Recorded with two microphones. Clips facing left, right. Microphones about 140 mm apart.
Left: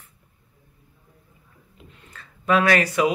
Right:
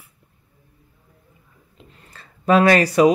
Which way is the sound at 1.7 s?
35° right (ahead or behind).